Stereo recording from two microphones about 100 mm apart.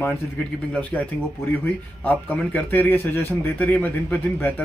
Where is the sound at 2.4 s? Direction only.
15° left (ahead or behind).